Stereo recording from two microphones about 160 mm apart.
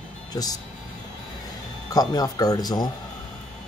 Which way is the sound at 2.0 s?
25° left (ahead or behind).